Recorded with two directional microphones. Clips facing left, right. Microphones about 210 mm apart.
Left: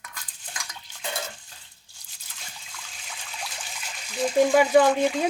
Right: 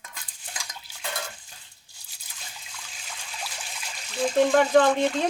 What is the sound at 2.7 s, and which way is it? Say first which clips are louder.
Trickle: left 1 dB; centre (ahead or behind).